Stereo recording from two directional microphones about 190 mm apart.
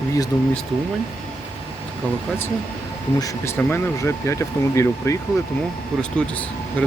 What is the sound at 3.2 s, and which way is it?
Speech, 15° left (ahead or behind).